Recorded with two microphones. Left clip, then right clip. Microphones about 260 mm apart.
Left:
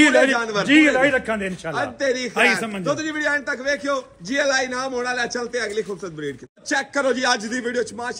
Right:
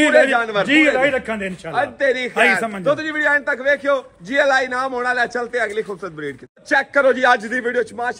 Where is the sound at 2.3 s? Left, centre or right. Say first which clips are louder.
Right 3 dB; centre.